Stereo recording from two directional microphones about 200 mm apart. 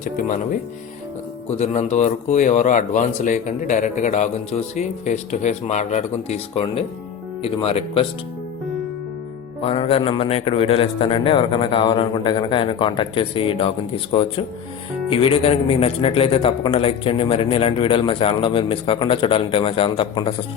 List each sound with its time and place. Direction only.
0.0 s a man's voice: 40° left (ahead or behind)
9.6 s a man's voice: 30° left (ahead or behind)